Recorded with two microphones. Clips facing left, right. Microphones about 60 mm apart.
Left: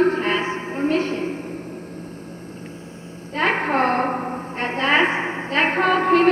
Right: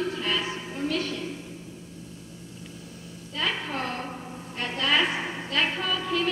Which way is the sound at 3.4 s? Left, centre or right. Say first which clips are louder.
Left 10 dB; left.